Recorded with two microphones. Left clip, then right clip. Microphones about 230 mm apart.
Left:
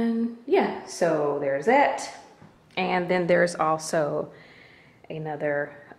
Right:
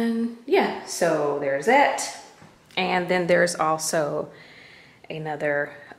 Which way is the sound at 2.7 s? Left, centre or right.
Centre.